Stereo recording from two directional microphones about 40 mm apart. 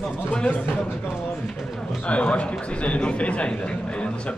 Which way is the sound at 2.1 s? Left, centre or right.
Left.